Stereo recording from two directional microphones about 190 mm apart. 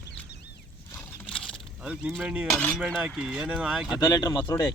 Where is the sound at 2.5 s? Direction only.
10° left (ahead or behind).